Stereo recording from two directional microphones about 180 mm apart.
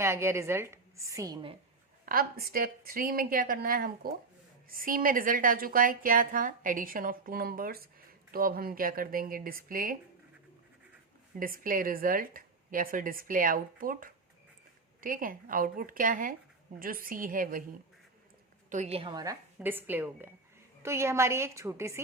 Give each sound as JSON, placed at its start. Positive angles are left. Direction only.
{"t": 0.0, "sound": "a woman's voice", "side_deg": -15}
{"t": 2.0, "sound": "a woman's voice", "side_deg": -55}
{"t": 11.3, "sound": "a woman's voice", "side_deg": -50}
{"t": 18.7, "sound": "a woman's voice", "side_deg": -35}